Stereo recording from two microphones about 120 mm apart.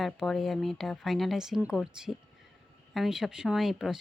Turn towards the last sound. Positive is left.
turn(degrees=0)  # may be behind; listen again after turning